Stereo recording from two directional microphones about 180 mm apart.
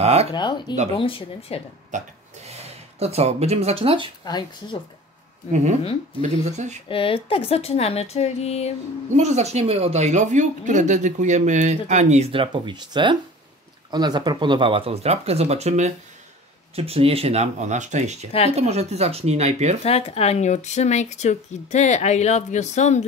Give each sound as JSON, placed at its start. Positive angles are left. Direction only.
{"t": 0.0, "sound": "speech", "side_deg": -35}
{"t": 0.3, "sound": "speech", "side_deg": 25}
{"t": 1.9, "sound": "speech", "side_deg": -40}
{"t": 4.2, "sound": "speech", "side_deg": 20}
{"t": 5.5, "sound": "speech", "side_deg": -40}
{"t": 6.9, "sound": "speech", "side_deg": 30}
{"t": 9.1, "sound": "speech", "side_deg": -40}
{"t": 19.8, "sound": "speech", "side_deg": 35}